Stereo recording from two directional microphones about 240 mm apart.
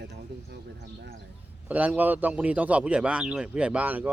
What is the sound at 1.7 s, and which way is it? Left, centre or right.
Speech, centre.